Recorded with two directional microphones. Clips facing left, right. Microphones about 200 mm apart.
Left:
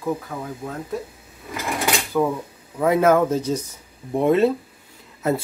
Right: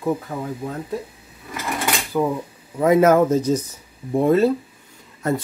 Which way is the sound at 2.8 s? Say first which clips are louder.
Right 2 dB; 10° right (ahead or behind).